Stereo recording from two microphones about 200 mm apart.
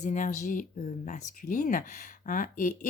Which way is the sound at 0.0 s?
40° left (ahead or behind).